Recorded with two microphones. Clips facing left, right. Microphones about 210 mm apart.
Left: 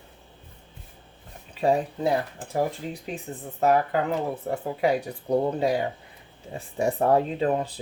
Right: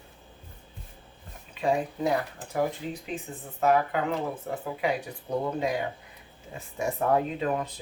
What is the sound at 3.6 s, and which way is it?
Speech, 35° left (ahead or behind).